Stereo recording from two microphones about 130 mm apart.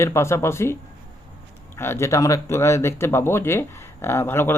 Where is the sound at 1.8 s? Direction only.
20° left (ahead or behind).